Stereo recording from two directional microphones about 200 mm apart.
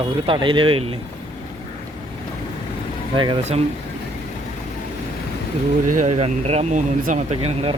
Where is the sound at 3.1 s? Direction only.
25° right (ahead or behind).